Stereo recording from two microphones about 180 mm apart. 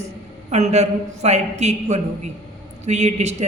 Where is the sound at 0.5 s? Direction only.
35° right (ahead or behind).